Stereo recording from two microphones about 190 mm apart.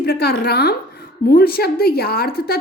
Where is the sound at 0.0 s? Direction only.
55° left (ahead or behind).